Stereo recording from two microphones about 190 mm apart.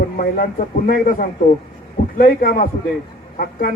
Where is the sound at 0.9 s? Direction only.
50° left (ahead or behind).